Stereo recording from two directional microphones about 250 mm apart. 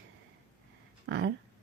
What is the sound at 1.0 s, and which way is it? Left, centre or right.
Speech, right.